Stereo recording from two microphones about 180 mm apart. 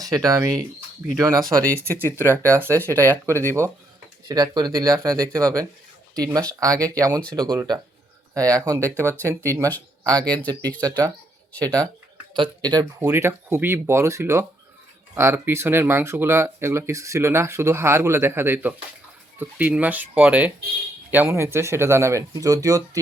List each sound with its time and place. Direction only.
0.0 s speech: 20° right (ahead or behind)
13.0 s speech: 15° right (ahead or behind)